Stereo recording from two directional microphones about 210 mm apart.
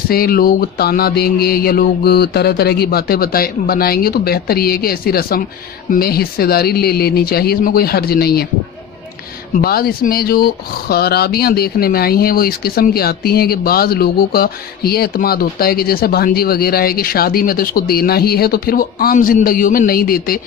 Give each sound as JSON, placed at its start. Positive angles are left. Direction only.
{"t": 0.1, "sound": "speech", "side_deg": 45}
{"t": 9.6, "sound": "speech", "side_deg": 45}